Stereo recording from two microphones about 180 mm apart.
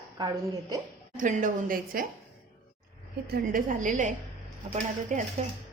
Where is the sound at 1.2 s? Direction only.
45° right (ahead or behind).